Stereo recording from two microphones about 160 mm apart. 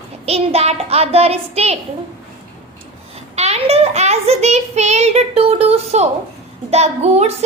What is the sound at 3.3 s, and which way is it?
A child's voice, 40° right (ahead or behind).